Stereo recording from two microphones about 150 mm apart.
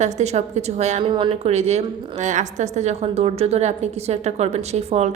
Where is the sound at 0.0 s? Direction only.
50° right (ahead or behind).